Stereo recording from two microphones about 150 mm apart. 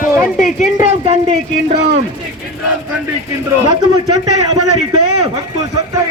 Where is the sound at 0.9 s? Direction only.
45° right (ahead or behind).